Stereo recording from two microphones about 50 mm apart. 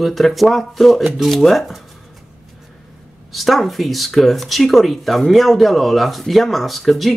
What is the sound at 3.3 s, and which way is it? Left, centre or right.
Speech, centre.